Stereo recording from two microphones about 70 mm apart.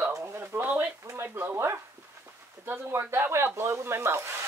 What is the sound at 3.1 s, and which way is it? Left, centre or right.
Speech, right.